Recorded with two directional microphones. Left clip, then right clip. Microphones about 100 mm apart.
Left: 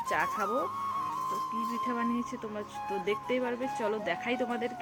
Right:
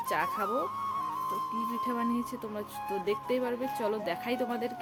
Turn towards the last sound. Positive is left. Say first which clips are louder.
# even
turn(degrees=-10)  # may be behind; listen again after turning